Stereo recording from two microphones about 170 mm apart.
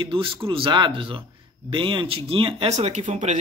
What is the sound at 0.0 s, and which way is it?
Speech, 30° right (ahead or behind).